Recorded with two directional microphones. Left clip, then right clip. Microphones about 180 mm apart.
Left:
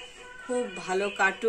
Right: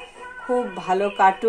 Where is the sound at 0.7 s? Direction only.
20° left (ahead or behind).